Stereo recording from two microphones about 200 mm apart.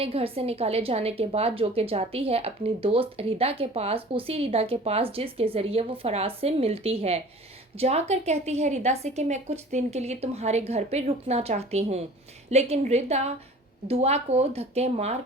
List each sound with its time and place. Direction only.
0.0 s a woman's voice: 30° right (ahead or behind)